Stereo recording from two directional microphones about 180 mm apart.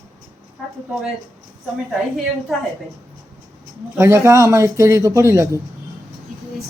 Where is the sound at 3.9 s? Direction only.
15° right (ahead or behind).